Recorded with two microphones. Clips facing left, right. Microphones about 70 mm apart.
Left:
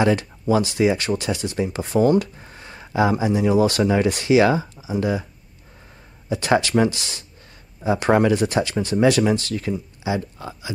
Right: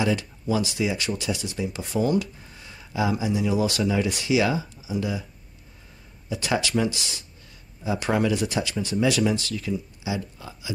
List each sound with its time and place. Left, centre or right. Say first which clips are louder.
0.0 s speech: left 6 dB; left
6.2 s speech: left 6 dB; left